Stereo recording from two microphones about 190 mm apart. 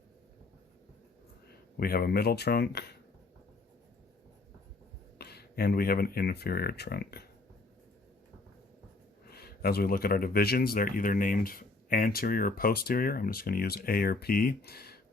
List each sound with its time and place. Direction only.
1.8 s speech: 50° left (ahead or behind)
5.1 s speech: 55° left (ahead or behind)
9.3 s speech: 55° left (ahead or behind)